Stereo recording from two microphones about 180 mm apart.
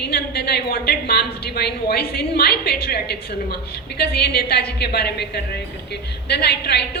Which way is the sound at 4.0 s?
60° left (ahead or behind).